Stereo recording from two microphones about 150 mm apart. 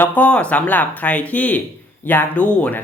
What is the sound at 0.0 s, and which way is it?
Speech, 10° left (ahead or behind).